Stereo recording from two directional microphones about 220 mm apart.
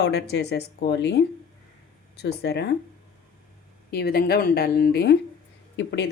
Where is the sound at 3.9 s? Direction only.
45° left (ahead or behind).